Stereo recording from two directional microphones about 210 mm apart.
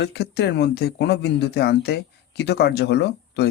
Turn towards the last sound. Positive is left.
turn(degrees=50)  # may be behind; listen again after turning